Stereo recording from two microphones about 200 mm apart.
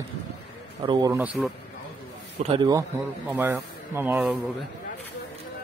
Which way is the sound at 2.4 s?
30° right (ahead or behind).